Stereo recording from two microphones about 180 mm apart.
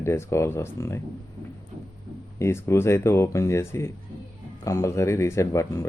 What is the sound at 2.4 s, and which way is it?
Speech, 15° left (ahead or behind).